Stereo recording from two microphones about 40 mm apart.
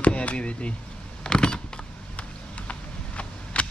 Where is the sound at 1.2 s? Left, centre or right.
Centre.